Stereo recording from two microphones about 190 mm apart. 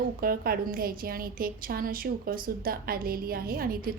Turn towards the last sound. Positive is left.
turn(degrees=-50)  # may be behind; listen again after turning